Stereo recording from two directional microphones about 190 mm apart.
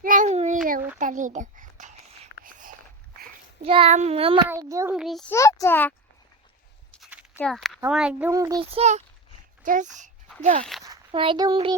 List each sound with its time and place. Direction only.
0.0 s a sound: 45° right (ahead or behind)
3.6 s child singing: 30° right (ahead or behind)
4.4 s a child's voice: 15° right (ahead or behind)
4.9 s speech: centre (ahead or behind)
5.3 s a child's voice: 15° left (ahead or behind)
7.0 s a sound: 5° right (ahead or behind)
7.3 s speech: centre (ahead or behind)
8.3 s a child's voice: 15° right (ahead or behind)
8.7 s child singing: 35° right (ahead or behind)
10.6 s a child's voice: centre (ahead or behind)
10.8 s a child's voice: 25° right (ahead or behind)